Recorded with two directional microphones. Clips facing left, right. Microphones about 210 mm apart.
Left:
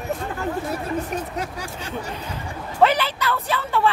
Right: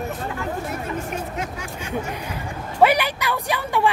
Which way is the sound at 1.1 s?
35° left (ahead or behind).